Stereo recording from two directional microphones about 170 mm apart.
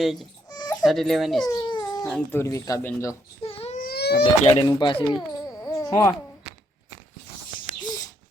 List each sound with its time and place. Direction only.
0.0 s speech: centre (ahead or behind)
0.5 s baby cry: 25° left (ahead or behind)
0.9 s speech: centre (ahead or behind)
1.5 s babbling: 25° left (ahead or behind)
2.0 s speech: 5° left (ahead or behind)
2.4 s speech: 20° left (ahead or behind)
3.4 s baby cry: 35° left (ahead or behind)
3.8 s a sound: 70° left (ahead or behind)
4.4 s speech: 35° left (ahead or behind)
5.1 s a sound: 20° left (ahead or behind)